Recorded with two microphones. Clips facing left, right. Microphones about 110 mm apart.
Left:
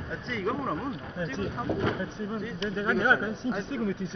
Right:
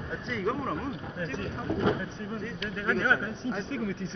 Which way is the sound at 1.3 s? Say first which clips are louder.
Left 2 dB; 20° left (ahead or behind).